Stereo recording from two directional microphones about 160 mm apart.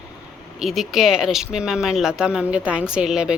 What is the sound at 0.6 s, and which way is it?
Speech, centre (ahead or behind).